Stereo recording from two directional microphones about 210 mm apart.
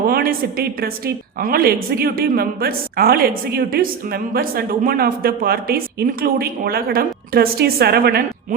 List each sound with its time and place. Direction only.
0.1 s a woman's voice: 45° right (ahead or behind)